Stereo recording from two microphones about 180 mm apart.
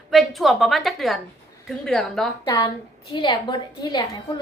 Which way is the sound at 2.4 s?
20° left (ahead or behind).